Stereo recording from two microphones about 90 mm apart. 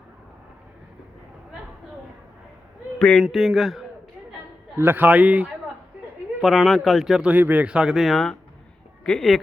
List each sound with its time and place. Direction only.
3.2 s a man's voice: centre (ahead or behind)
4.8 s a man's voice: 20° right (ahead or behind)
6.4 s a man's voice: 5° right (ahead or behind)
7.3 s speech: 20° right (ahead or behind); by 9.4 s 10° left (ahead or behind)